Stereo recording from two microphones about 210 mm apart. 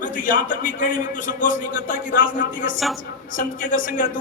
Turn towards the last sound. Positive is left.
turn(degrees=40)  # may be behind; listen again after turning